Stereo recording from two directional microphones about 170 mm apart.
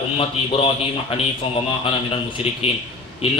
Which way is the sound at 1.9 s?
35° left (ahead or behind).